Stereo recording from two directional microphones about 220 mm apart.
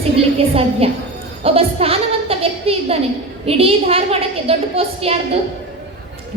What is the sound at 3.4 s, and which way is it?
A woman's voice, 25° right (ahead or behind).